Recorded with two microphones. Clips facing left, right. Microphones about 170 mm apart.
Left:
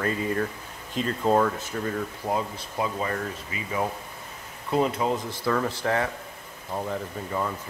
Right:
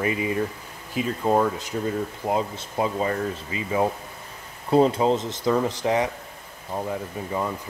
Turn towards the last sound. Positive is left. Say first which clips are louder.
# right 2 dB
turn(degrees=-10)  # may be behind; listen again after turning